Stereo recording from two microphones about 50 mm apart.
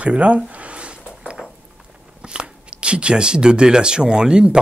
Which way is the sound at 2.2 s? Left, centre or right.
Centre.